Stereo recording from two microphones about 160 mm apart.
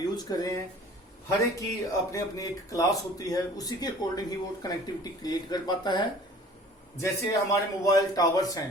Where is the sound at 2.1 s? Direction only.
20° left (ahead or behind).